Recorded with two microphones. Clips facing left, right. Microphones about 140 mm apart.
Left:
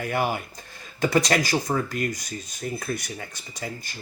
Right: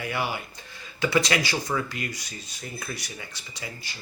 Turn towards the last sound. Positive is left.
turn(degrees=50)  # may be behind; listen again after turning